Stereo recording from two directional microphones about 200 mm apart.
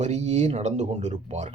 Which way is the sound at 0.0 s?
35° right (ahead or behind).